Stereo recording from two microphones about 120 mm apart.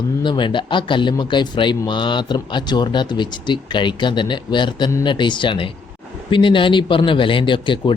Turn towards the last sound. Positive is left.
turn(degrees=45)  # may be behind; listen again after turning